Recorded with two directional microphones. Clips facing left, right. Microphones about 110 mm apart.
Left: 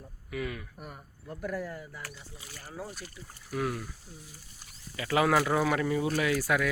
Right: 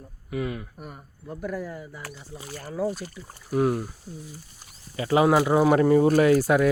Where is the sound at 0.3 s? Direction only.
25° right (ahead or behind).